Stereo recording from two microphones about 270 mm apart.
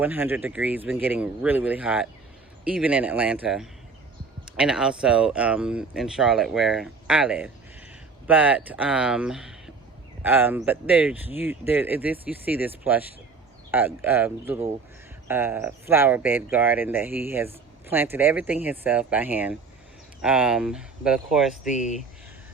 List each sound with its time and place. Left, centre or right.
0.0 s speech: centre
21.7 s speech: left